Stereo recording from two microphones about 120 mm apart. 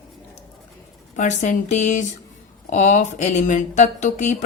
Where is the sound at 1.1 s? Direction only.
90° left.